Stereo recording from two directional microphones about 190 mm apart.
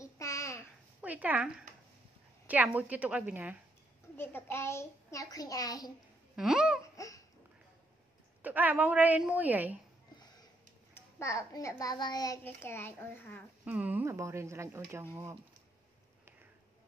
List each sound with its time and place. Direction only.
0.0 s babbling: 15° left (ahead or behind)
1.0 s a sound: 10° right (ahead or behind)
2.4 s a woman's voice: 10° right (ahead or behind)
4.2 s a child's voice: 10° left (ahead or behind)
6.3 s speech: 5° right (ahead or behind)
6.8 s babbling: 15° left (ahead or behind)
8.4 s a woman's voice: 10° right (ahead or behind)
11.0 s a child's voice: 15° left (ahead or behind)
13.7 s a woman's voice: 10° right (ahead or behind)